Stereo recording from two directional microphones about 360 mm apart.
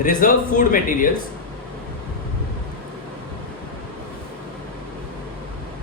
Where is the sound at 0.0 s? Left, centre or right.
Left.